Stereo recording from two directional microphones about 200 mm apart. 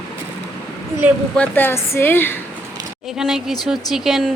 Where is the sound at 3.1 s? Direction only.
Centre (ahead or behind).